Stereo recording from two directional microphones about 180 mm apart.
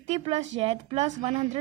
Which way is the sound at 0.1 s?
35° right (ahead or behind).